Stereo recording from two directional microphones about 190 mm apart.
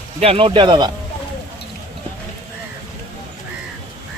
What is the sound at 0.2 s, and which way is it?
Speech, 30° right (ahead or behind).